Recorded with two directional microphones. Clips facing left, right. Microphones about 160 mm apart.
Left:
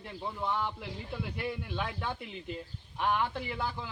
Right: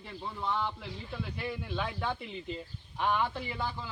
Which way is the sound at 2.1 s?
10° left (ahead or behind).